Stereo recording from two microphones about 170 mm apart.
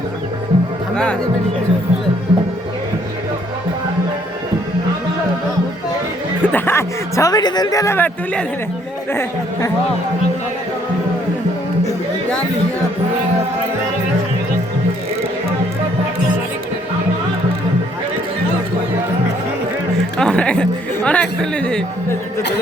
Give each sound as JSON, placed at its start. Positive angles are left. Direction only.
{"t": 2.3, "sound": "music", "side_deg": -30}
{"t": 6.4, "sound": "a man's voice", "side_deg": 10}
{"t": 9.1, "sound": "speech", "side_deg": 20}
{"t": 20.1, "sound": "speech", "side_deg": 5}